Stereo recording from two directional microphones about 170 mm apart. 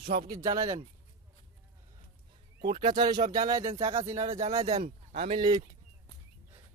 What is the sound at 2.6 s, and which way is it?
Speech, 50° right (ahead or behind).